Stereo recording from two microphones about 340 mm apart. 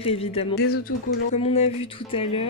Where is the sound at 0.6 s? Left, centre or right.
Left.